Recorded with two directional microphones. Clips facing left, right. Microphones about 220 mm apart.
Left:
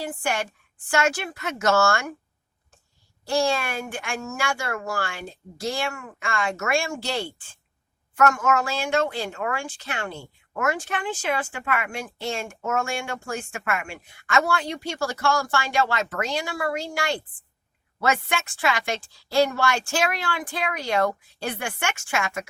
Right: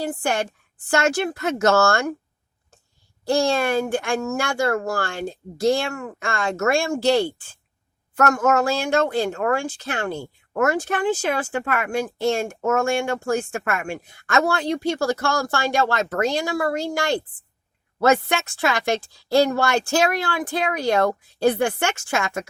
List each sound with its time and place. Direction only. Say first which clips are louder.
0.0 s speech: right 4 dB; 40° right (ahead or behind)
3.3 s speech: right 4 dB; 40° right (ahead or behind)
4.2 s speech: right 5 dB; 50° right (ahead or behind)
4.5 s speech: right 7 dB; 40° right (ahead or behind)